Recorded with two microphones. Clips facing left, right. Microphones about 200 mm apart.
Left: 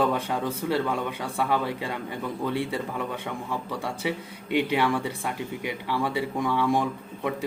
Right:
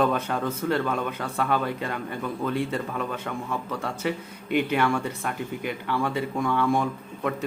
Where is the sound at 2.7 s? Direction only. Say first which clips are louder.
Right 1 dB; 15° left (ahead or behind).